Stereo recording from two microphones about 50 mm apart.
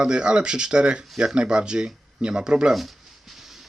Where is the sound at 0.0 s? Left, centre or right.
Centre.